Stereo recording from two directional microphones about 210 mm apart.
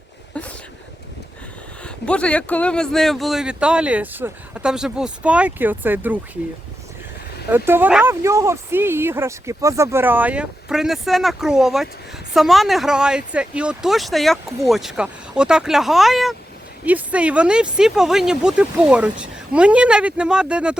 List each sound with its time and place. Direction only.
1.8 s speech: 5° left (ahead or behind)
7.5 s speech: 10° right (ahead or behind)